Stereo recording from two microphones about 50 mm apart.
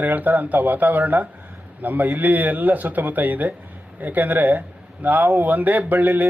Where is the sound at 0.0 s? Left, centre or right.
Right.